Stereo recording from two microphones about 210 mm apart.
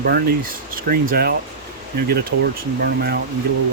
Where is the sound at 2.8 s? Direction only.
50° right (ahead or behind).